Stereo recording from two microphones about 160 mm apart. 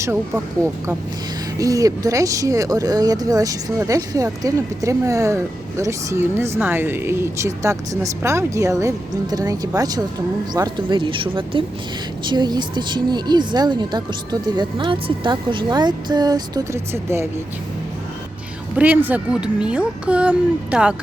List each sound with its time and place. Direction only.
0.0 s speech: 15° right (ahead or behind)
18.8 s speech: 10° right (ahead or behind)